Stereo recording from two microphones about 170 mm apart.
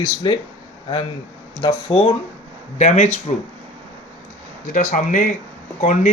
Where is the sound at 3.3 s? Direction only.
40° left (ahead or behind).